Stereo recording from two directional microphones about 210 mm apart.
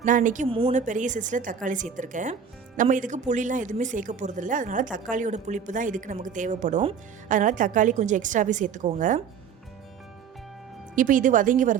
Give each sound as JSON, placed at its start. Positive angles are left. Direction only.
{"t": 0.0, "sound": "a woman's voice", "side_deg": -40}
{"t": 0.4, "sound": "a woman's voice", "side_deg": -25}
{"t": 10.9, "sound": "a woman's voice", "side_deg": -40}